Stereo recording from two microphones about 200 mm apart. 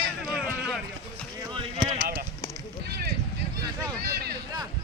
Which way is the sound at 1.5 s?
25° right (ahead or behind).